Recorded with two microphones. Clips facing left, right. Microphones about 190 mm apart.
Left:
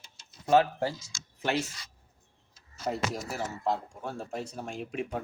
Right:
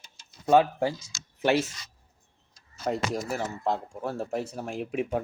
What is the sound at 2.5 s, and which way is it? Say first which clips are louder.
Speech: right 3 dB; 5° left (ahead or behind).